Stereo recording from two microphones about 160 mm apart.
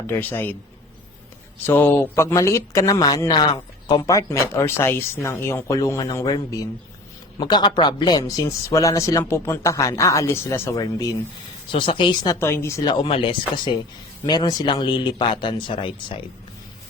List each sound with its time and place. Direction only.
0.1 s speech: 15° left (ahead or behind)
1.6 s speech: 15° left (ahead or behind)
12.4 s speech: 15° left (ahead or behind); by 16.2 s 30° left (ahead or behind)